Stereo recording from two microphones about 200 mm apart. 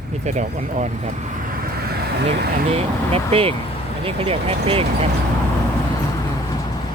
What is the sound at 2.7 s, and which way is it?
Speech, 30° right (ahead or behind).